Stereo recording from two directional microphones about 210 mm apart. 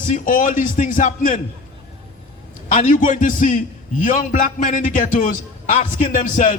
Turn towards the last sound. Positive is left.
turn(degrees=35)  # may be behind; listen again after turning